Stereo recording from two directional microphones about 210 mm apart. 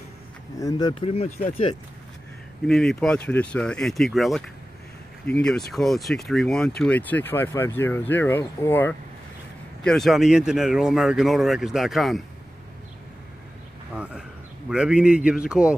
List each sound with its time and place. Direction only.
0.6 s speech: 15° left (ahead or behind)
0.9 s speech: 30° left (ahead or behind)
2.6 s speech: centre (ahead or behind)
13.9 s speech: 5° right (ahead or behind)